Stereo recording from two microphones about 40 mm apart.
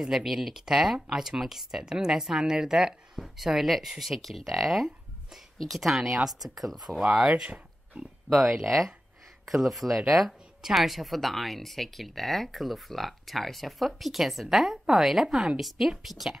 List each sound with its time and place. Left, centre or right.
0.0 s a woman's voice: centre
7.2 s a woman's voice: centre
7.4 s a sound: right
8.3 s speech: centre